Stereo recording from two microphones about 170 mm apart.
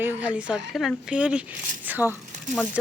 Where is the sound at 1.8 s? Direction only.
10° right (ahead or behind).